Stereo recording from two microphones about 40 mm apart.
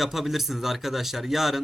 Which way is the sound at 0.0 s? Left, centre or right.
Centre.